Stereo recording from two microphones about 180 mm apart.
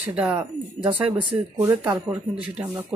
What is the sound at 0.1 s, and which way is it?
Speech, 5° right (ahead or behind).